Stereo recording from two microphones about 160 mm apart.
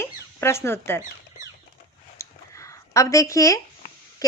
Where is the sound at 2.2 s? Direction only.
20° left (ahead or behind).